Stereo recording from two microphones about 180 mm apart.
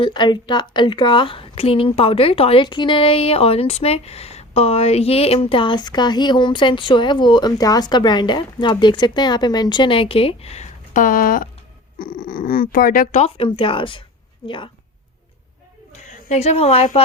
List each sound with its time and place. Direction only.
0.0 s a woman's voice: 25° left (ahead or behind)
16.3 s speech: 40° left (ahead or behind)